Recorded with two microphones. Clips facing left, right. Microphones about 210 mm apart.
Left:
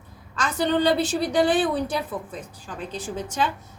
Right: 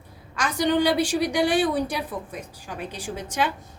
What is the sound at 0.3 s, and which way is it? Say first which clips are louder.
A woman's voice: right 1 dB; 10° right (ahead or behind).